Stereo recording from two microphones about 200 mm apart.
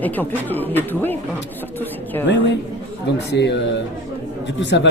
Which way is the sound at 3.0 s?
60° left (ahead or behind).